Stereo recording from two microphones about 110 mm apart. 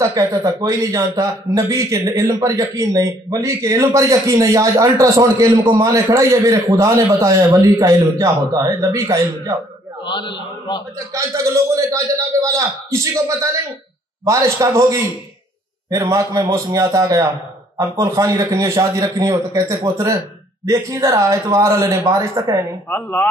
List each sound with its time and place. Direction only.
0.0 s speech: 35° right (ahead or behind)
10.0 s a man's voice: 45° left (ahead or behind)
11.1 s a man's voice: 30° right (ahead or behind)
22.8 s a man's voice: 15° left (ahead or behind)